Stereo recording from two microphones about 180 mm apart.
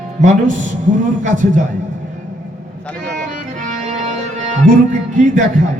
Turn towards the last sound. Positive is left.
turn(degrees=-45)  # may be behind; listen again after turning